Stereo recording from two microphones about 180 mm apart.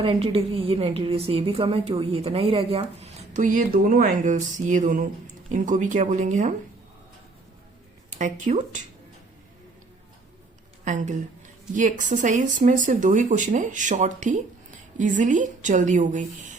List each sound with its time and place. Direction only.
0.0 s a woman's voice: 30° right (ahead or behind)
8.2 s a woman's voice: 40° right (ahead or behind)
10.8 s speech: 45° right (ahead or behind)